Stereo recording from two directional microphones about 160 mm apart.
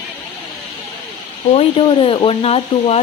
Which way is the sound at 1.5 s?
30° left (ahead or behind).